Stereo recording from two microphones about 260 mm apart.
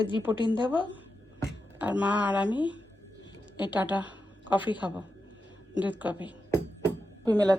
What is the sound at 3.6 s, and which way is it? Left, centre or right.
A woman's voice, centre.